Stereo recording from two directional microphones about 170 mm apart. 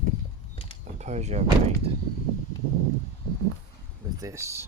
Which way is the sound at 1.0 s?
40° right (ahead or behind).